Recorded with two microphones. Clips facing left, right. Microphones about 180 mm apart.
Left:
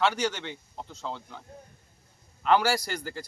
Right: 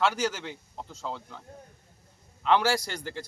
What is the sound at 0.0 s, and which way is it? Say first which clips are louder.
A man's voice: even; centre (ahead or behind).